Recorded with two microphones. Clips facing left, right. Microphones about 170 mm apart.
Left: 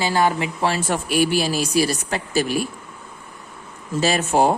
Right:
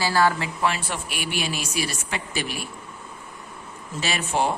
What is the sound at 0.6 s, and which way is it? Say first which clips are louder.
Speech: left 4 dB; 40° left (ahead or behind).